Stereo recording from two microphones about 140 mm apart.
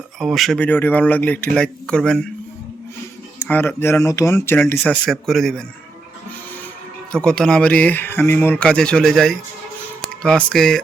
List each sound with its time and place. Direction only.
0.2 s speech: centre (ahead or behind)
3.4 s a man's voice: 15° left (ahead or behind)
7.1 s a man's voice: 5° left (ahead or behind)